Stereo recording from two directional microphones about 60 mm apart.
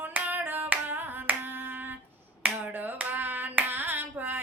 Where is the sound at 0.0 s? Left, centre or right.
Right.